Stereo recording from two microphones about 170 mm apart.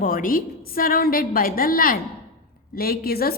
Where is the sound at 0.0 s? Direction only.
55° left (ahead or behind).